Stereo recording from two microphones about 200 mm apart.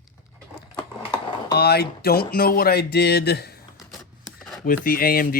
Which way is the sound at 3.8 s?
Centre (ahead or behind).